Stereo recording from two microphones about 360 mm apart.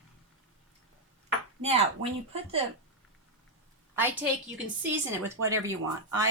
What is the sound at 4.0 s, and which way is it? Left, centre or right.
Speech, centre.